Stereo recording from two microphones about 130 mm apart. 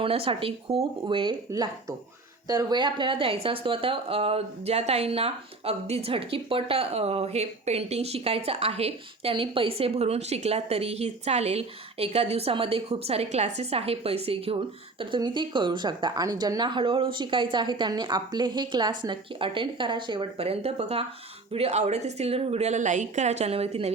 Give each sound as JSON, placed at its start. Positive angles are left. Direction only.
{"t": 0.0, "sound": "speech", "side_deg": -45}
{"t": 1.0, "sound": "speech", "side_deg": -40}
{"t": 1.5, "sound": "a woman's voice", "side_deg": -30}